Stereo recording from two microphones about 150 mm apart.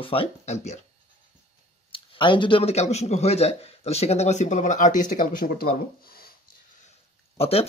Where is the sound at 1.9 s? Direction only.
35° left (ahead or behind); by 6.4 s 80° left.